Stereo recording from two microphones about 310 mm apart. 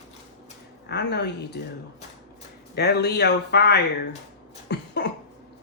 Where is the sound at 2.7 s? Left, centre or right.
Left.